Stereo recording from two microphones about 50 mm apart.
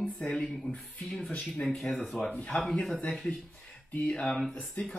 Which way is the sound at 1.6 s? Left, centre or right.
Centre.